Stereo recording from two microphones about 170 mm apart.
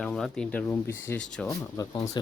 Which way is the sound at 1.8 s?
20° left (ahead or behind).